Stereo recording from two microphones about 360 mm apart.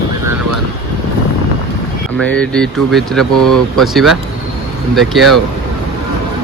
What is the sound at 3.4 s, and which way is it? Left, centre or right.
Speech, right.